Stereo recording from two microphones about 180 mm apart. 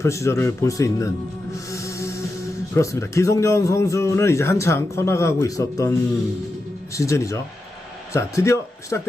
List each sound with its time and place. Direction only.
0.0 s a man's voice: 15° left (ahead or behind)
1.5 s music: 15° left (ahead or behind)
2.7 s a man's voice: 15° left (ahead or behind)